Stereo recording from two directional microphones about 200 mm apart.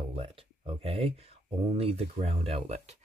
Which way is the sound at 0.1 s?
30° right (ahead or behind).